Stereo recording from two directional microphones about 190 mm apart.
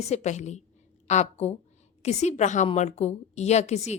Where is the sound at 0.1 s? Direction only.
35° left (ahead or behind).